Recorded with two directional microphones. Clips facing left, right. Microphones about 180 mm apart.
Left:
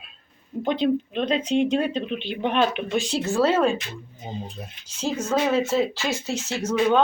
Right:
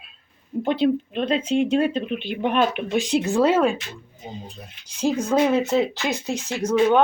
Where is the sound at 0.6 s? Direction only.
5° right (ahead or behind).